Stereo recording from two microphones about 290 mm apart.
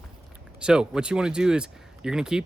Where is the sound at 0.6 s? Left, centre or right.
Centre.